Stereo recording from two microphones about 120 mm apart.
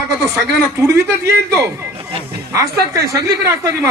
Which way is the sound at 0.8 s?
25° right (ahead or behind).